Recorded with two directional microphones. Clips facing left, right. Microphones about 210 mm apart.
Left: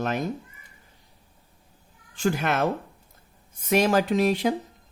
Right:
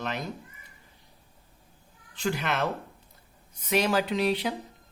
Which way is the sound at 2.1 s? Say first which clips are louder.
Left 5 dB; 45° left (ahead or behind).